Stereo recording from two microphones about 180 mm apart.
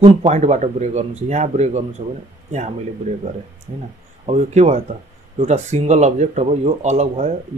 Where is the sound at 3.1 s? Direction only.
40° right (ahead or behind).